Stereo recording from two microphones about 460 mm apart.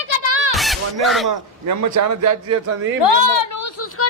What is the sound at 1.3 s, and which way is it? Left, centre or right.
A man's voice, right.